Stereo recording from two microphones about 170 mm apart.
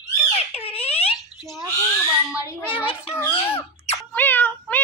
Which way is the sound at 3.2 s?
15° left (ahead or behind).